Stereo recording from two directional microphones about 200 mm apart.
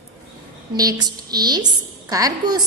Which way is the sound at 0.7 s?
20° right (ahead or behind).